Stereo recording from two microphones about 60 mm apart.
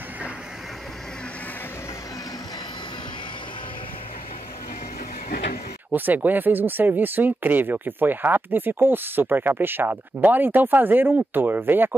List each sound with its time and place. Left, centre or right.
5.9 s speech: right